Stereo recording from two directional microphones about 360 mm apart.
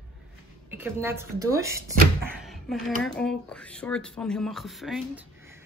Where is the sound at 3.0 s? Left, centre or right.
Centre.